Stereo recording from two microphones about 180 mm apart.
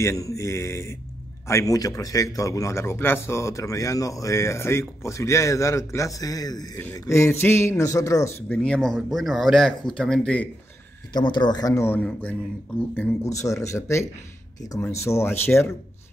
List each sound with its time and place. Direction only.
0.0 s a man's voice: 15° left (ahead or behind)
8.5 s speech: 5° left (ahead or behind)
11.1 s a man's voice: 25° left (ahead or behind)